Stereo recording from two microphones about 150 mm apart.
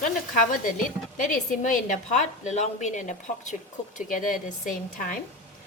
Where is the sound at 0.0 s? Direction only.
65° left (ahead or behind).